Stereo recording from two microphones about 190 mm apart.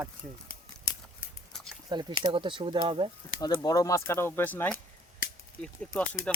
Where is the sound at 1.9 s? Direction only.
20° right (ahead or behind).